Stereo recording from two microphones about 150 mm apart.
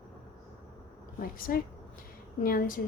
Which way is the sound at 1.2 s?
75° left (ahead or behind).